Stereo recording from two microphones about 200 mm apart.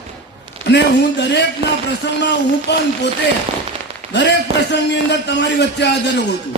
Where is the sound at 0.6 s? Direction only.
55° left (ahead or behind).